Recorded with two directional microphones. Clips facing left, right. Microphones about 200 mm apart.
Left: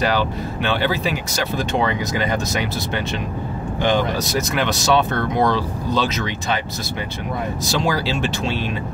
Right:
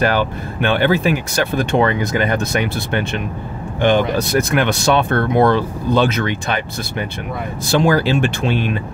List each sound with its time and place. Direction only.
0.0 s speech: 55° right (ahead or behind)